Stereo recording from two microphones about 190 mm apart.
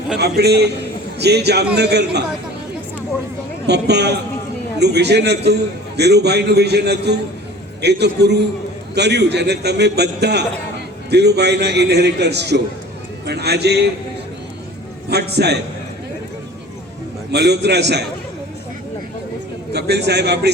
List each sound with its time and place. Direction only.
0.2 s a man's voice: 60° right (ahead or behind)
3.7 s a man's voice: 60° right (ahead or behind)
15.1 s a man's voice: 60° right (ahead or behind)
17.3 s a man's voice: 60° right (ahead or behind)
19.7 s a man's voice: 60° right (ahead or behind)